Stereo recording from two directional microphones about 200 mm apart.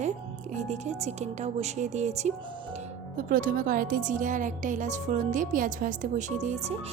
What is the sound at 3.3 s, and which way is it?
A woman's voice, 45° right (ahead or behind).